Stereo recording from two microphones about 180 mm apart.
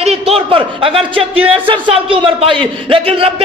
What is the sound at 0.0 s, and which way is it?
A man's voice, 35° right (ahead or behind).